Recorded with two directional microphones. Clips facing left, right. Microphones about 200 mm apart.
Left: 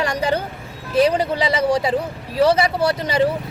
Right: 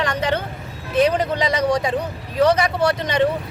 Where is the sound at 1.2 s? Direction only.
5° left (ahead or behind).